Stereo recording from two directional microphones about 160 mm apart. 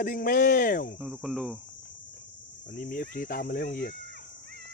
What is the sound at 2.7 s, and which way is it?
Speech, 65° left (ahead or behind).